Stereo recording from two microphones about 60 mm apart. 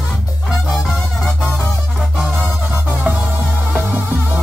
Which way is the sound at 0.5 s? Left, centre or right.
Centre.